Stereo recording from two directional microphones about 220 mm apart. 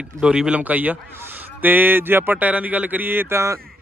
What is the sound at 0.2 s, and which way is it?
A man's voice, 5° right (ahead or behind).